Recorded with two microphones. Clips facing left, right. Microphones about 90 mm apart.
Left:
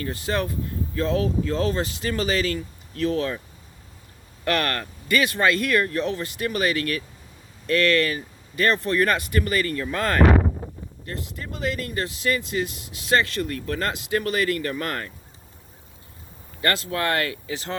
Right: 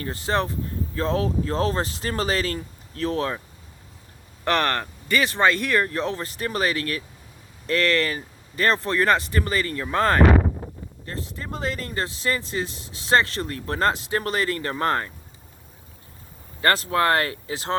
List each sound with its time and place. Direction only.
0.0 s speech: 35° right (ahead or behind)
4.4 s speech: 30° right (ahead or behind)
16.6 s speech: 35° right (ahead or behind)